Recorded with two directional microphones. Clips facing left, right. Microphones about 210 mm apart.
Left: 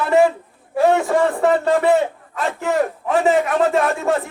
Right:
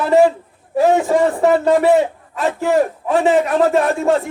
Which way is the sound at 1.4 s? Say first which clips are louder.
Right 3 dB; 35° right (ahead or behind).